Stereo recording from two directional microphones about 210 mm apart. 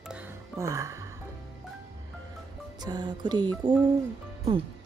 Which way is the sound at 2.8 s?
20° right (ahead or behind).